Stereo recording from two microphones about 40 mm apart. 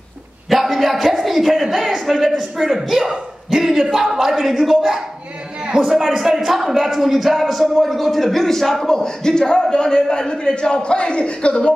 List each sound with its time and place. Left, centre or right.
0.5 s a man's voice: centre
8.9 s a man's voice: centre